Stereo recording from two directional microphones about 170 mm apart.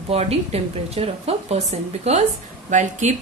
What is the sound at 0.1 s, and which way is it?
A woman's voice, 35° right (ahead or behind).